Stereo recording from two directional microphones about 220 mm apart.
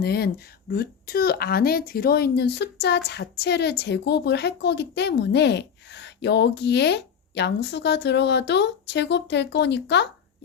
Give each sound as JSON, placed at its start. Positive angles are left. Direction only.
{"t": 0.0, "sound": "a woman's voice", "side_deg": 45}